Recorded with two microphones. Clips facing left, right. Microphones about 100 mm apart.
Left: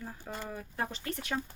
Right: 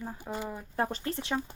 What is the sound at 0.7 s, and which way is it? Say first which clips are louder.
Speech: right 6 dB; 35° right (ahead or behind).